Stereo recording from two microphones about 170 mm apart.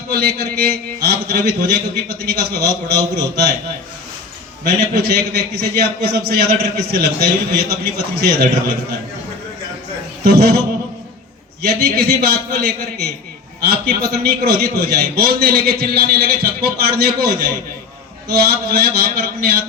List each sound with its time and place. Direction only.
0.1 s a man's voice: 65° right (ahead or behind)
4.6 s a man's voice: 65° right (ahead or behind)
10.2 s a man's voice: 65° right (ahead or behind)
11.6 s a man's voice: 65° right (ahead or behind)